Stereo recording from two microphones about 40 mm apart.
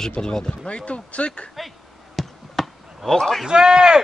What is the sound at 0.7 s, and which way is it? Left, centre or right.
Speech, left.